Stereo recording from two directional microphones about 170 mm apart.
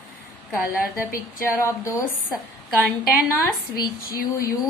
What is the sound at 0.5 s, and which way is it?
Speech, 10° right (ahead or behind).